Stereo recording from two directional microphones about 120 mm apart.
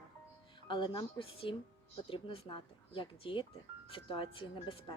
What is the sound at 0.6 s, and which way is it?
Speech, 45° left (ahead or behind).